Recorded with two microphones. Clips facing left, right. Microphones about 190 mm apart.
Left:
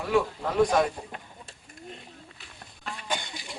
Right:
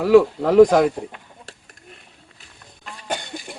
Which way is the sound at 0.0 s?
90° right.